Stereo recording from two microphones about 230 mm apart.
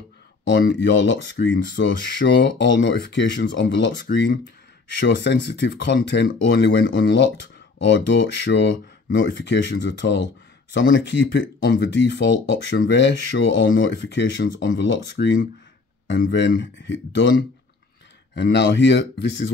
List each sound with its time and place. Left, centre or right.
0.7 s speech: left